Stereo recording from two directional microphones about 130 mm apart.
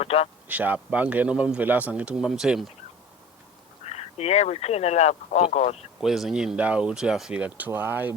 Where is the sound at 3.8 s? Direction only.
55° left (ahead or behind).